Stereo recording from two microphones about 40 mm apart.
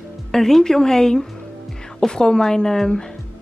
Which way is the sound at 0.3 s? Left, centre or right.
Centre.